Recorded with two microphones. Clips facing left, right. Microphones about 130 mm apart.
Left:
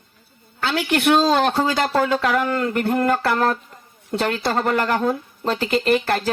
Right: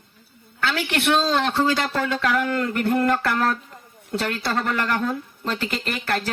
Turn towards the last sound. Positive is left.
turn(degrees=40)  # may be behind; listen again after turning